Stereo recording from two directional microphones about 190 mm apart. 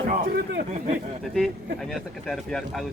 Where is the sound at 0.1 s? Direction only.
50° right (ahead or behind).